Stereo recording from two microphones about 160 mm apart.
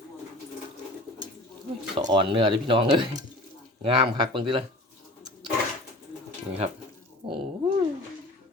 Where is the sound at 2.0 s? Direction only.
30° right (ahead or behind).